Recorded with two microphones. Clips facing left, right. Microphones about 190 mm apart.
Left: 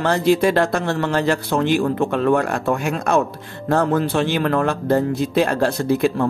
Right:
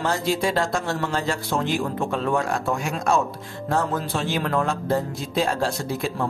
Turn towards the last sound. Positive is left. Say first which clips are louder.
# left 8 dB
turn(degrees=65)  # may be behind; listen again after turning